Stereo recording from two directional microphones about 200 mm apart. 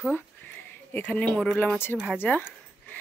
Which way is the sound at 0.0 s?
10° left (ahead or behind).